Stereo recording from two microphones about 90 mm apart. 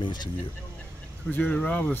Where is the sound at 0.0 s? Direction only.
55° left (ahead or behind).